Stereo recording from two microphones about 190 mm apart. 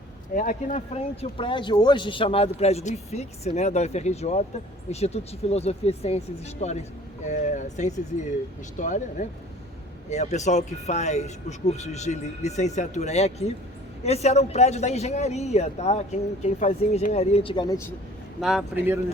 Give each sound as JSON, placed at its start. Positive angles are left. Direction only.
{"t": 0.3, "sound": "speech", "side_deg": 40}
{"t": 18.3, "sound": "a man's voice", "side_deg": 0}